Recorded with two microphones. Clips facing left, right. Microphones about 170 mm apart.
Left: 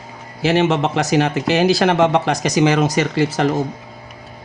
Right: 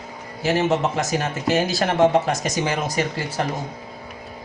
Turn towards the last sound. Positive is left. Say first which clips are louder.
# left 7 dB
turn(degrees=90)